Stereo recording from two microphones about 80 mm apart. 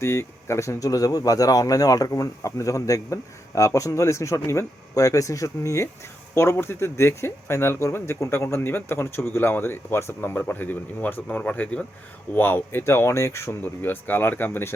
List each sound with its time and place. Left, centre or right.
0.0 s speech: left